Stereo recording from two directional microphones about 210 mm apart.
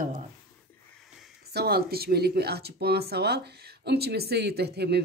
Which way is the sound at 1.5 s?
50° right (ahead or behind).